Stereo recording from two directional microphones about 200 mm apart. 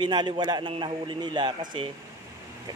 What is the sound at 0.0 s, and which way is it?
Speech, 20° right (ahead or behind).